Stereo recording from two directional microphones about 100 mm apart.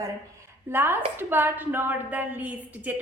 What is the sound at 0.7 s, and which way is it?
A woman's voice, 25° right (ahead or behind).